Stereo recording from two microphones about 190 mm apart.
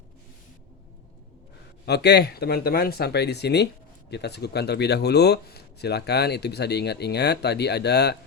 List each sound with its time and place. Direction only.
1.9 s speech: 60° left (ahead or behind)